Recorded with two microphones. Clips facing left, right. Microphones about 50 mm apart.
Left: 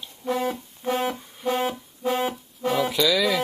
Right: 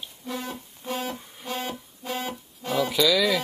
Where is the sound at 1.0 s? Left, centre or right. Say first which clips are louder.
Left 7 dB; centre.